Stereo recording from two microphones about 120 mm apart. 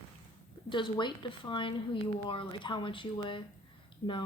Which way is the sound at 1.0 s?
40° left (ahead or behind).